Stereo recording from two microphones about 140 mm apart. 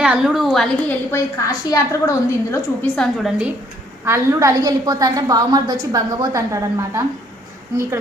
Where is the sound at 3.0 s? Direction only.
Centre (ahead or behind).